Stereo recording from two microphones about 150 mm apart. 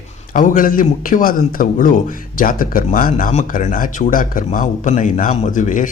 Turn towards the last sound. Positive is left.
turn(degrees=60)  # may be behind; listen again after turning